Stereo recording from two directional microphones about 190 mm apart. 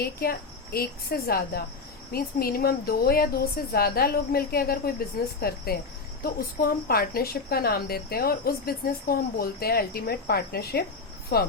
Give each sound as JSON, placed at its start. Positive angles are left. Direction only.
{"t": 0.0, "sound": "a woman's voice", "side_deg": 55}